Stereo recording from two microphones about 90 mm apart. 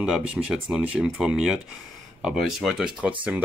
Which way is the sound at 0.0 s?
5° right (ahead or behind).